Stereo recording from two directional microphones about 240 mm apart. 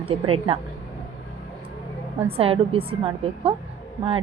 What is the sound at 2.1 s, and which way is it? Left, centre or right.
A woman's voice, right.